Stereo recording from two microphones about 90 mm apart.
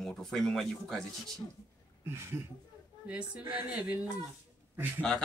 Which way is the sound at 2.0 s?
25° right (ahead or behind).